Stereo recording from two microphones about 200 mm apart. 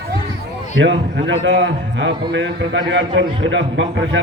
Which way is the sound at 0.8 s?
65° right (ahead or behind).